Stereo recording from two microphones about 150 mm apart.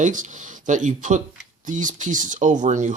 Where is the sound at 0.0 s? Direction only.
60° right (ahead or behind).